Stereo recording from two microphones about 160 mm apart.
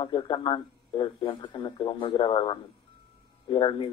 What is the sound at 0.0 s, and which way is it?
Speech, 30° left (ahead or behind).